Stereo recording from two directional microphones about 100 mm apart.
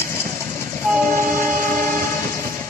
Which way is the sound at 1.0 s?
25° left (ahead or behind).